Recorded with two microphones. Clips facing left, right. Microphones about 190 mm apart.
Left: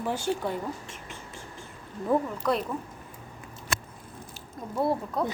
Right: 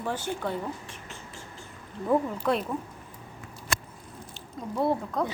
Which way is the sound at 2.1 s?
Centre (ahead or behind).